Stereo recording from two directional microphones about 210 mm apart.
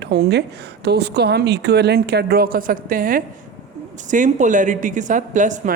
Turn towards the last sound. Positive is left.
turn(degrees=-35)  # may be behind; listen again after turning